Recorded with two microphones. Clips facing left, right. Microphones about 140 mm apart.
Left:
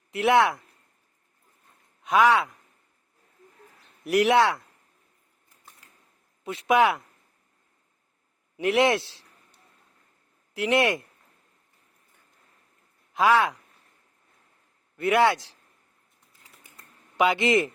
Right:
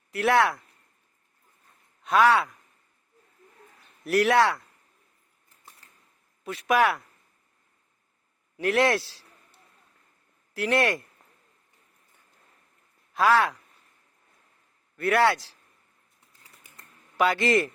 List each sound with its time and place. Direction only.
0.1 s a man's voice: 20° left (ahead or behind)
2.0 s speech: 15° left (ahead or behind)
4.0 s a man's voice: 15° left (ahead or behind)
6.4 s a man's voice: 20° left (ahead or behind)
8.5 s a man's voice: 15° left (ahead or behind)
10.5 s a man's voice: 20° left (ahead or behind)
13.1 s speech: 15° left (ahead or behind)
14.9 s a man's voice: 20° left (ahead or behind)
17.2 s a man's voice: 20° left (ahead or behind)